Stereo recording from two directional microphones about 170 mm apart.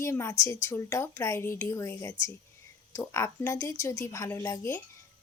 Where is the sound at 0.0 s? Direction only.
15° left (ahead or behind).